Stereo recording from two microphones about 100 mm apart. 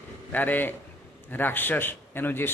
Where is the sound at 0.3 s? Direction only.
20° left (ahead or behind).